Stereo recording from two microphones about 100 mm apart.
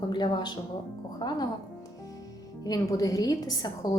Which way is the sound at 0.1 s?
45° left (ahead or behind).